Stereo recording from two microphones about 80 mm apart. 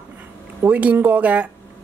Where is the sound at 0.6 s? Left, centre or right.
Centre.